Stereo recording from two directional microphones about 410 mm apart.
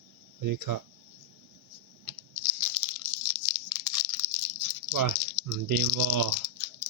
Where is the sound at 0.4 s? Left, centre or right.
Right.